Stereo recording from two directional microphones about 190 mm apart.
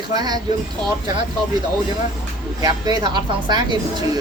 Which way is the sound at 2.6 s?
20° right (ahead or behind).